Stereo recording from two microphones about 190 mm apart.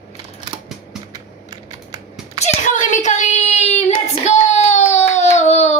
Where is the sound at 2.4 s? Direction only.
40° left (ahead or behind).